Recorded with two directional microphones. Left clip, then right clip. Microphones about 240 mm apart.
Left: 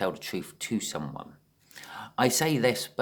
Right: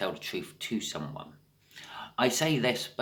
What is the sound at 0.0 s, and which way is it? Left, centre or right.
Speech, left.